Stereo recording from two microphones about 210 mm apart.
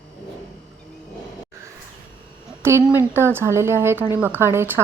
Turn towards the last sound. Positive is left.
turn(degrees=-10)  # may be behind; listen again after turning